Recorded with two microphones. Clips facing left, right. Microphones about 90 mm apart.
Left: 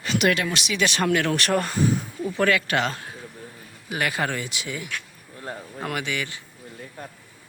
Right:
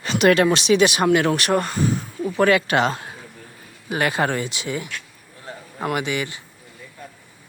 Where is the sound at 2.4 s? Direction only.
20° right (ahead or behind).